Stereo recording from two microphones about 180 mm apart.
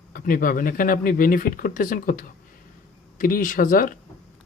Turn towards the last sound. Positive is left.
turn(degrees=50)  # may be behind; listen again after turning